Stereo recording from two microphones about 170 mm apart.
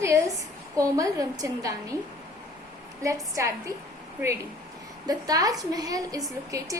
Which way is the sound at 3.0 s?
20° right (ahead or behind).